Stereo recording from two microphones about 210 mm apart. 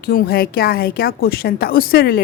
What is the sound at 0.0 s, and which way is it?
A woman's voice, 45° left (ahead or behind).